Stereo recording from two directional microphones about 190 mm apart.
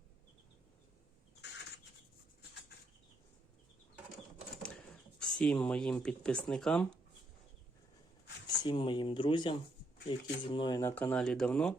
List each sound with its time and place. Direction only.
5.4 s speech: 5° left (ahead or behind)
8.4 s speech: 25° left (ahead or behind)
10.9 s speech: 5° left (ahead or behind)